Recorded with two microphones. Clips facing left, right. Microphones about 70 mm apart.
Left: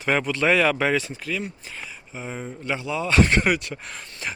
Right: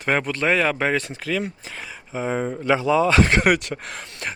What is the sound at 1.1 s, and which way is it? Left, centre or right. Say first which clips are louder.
Speech: right 4 dB; right.